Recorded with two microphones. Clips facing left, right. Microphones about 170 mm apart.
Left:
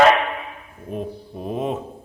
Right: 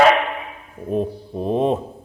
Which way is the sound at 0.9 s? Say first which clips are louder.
Right 7 dB; 30° right (ahead or behind).